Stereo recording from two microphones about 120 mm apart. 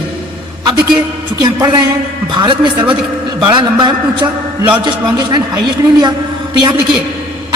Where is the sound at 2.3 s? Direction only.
40° right (ahead or behind).